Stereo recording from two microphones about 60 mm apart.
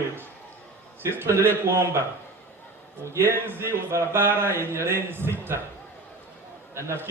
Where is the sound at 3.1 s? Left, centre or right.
Right.